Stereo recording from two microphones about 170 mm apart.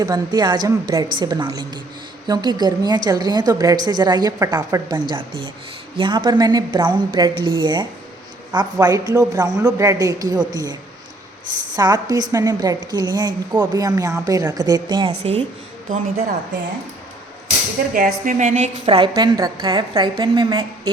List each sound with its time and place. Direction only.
0.0 s a woman's voice: 25° right (ahead or behind)
11.8 s a woman's voice: 25° right (ahead or behind)
17.9 s a woman's voice: 50° right (ahead or behind)
18.9 s a woman's voice: 30° right (ahead or behind)